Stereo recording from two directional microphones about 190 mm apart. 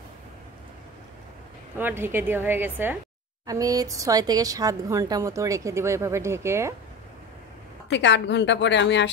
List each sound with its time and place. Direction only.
1.8 s speech: 10° right (ahead or behind)
7.9 s a woman's voice: 65° left (ahead or behind)